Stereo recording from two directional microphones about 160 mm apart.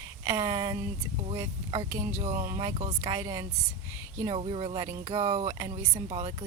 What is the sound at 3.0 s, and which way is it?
Speech, 20° right (ahead or behind).